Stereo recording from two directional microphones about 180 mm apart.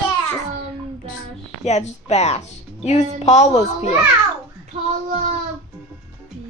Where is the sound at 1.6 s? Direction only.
40° left (ahead or behind).